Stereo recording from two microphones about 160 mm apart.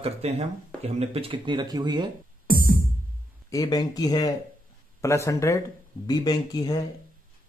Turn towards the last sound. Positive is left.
turn(degrees=25)  # may be behind; listen again after turning